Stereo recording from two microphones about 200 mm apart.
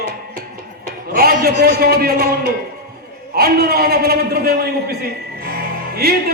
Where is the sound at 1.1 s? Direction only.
50° right (ahead or behind).